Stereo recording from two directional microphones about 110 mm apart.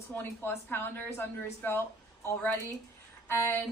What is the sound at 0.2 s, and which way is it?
Speech, 20° left (ahead or behind).